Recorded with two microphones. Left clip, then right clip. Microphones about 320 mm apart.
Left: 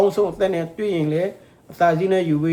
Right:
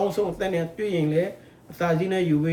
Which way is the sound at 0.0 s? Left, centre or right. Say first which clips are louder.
Left 7 dB; centre.